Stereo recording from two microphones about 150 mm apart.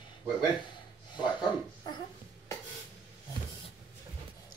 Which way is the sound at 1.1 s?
30° left (ahead or behind).